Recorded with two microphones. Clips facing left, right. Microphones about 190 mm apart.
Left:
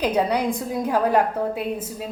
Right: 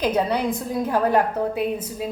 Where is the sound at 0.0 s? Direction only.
10° left (ahead or behind).